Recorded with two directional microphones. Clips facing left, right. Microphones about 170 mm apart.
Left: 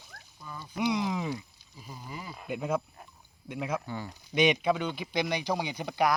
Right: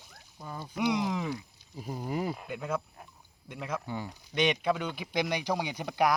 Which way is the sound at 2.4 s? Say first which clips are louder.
Left 3 dB; 15° left (ahead or behind).